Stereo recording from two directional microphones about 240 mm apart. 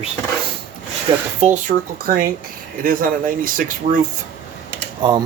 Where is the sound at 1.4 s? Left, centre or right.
Right.